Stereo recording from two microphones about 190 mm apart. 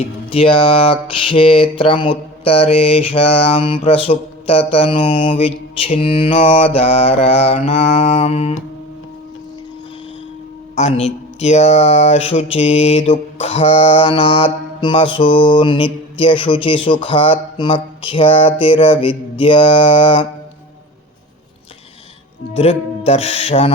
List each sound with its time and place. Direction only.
0.3 s speech: 30° left (ahead or behind)
10.8 s speech: 35° left (ahead or behind)
22.5 s speech: 30° left (ahead or behind)